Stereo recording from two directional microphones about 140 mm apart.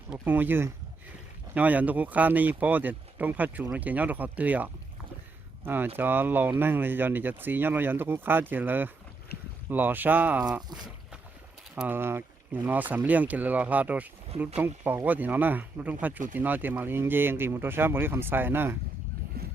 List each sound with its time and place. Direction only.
0.1 s speech: 15° right (ahead or behind)
11.7 s speech: 10° right (ahead or behind)
19.4 s run: 90° right